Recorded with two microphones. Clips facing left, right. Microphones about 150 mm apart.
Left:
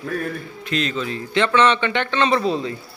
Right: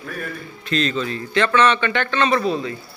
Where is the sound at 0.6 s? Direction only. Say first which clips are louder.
Right 2 dB; 15° left (ahead or behind).